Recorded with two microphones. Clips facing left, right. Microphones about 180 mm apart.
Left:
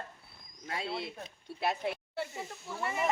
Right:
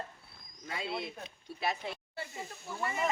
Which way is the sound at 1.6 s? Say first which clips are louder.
Left 3 dB; 60° left (ahead or behind).